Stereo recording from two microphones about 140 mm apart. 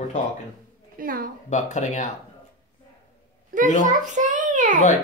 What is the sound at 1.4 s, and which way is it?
Speech, 60° left (ahead or behind).